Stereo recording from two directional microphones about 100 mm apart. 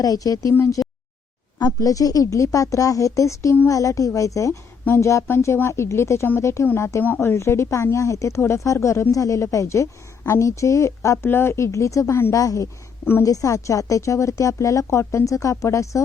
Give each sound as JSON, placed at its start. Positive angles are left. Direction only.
{"t": 0.0, "sound": "a woman's voice", "side_deg": 35}